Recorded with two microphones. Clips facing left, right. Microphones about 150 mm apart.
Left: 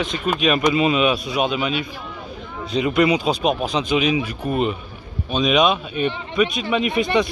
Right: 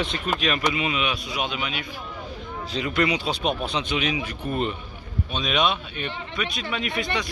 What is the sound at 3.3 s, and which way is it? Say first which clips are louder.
Speech: left 6 dB; 30° right (ahead or behind).